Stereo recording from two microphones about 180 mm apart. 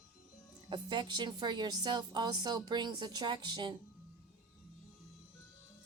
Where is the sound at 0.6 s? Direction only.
25° right (ahead or behind).